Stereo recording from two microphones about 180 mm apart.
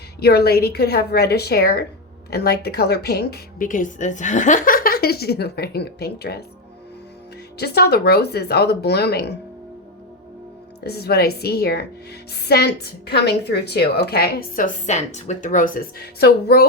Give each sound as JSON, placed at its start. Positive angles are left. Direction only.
{"t": 0.2, "sound": "a woman's voice", "side_deg": 60}
{"t": 7.6, "sound": "a woman's voice", "side_deg": 65}
{"t": 10.8, "sound": "a woman's voice", "side_deg": 60}